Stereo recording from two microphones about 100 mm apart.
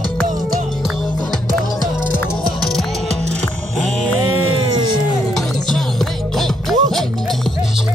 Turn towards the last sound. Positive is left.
turn(degrees=5)  # may be behind; listen again after turning